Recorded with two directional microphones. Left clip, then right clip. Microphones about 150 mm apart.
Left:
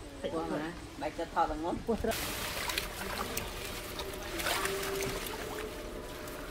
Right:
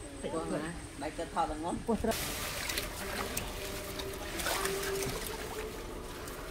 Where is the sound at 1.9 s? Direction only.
30° right (ahead or behind).